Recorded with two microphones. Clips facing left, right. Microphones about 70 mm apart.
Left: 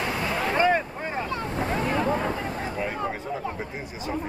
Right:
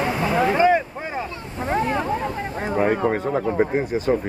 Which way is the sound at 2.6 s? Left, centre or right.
Right.